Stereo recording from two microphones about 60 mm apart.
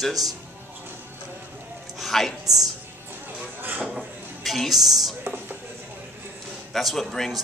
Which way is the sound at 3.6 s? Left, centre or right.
Right.